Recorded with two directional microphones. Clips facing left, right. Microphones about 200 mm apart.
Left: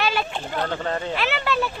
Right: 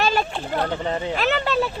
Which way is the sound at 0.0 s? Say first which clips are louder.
Right 3 dB; 40° right (ahead or behind).